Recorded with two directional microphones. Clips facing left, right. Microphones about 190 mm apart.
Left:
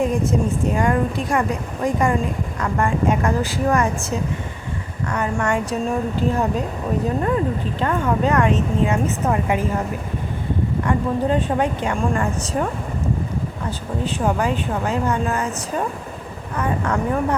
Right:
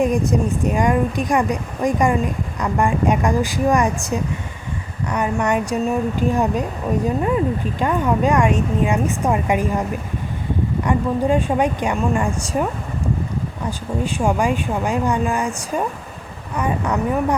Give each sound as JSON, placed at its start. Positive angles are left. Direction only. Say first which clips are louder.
{"t": 0.0, "sound": "speech", "louder": "right 2 dB", "side_deg": -15}
{"t": 10.8, "sound": "speech", "louder": "right 2 dB", "side_deg": -10}
{"t": 13.7, "sound": "speech", "louder": "right 3 dB", "side_deg": -10}